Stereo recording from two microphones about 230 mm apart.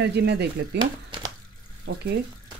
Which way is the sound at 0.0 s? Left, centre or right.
Right.